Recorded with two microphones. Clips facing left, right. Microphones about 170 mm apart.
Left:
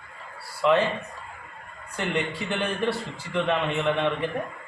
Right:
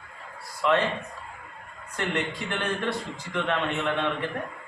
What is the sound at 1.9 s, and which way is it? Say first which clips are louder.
A man's voice: left 1 dB; 10° left (ahead or behind).